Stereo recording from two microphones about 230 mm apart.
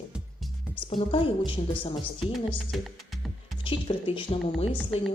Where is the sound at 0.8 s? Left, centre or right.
Left.